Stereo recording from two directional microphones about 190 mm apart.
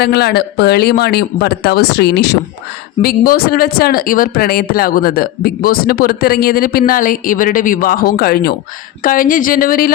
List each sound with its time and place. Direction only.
0.0 s speech: 60° left (ahead or behind)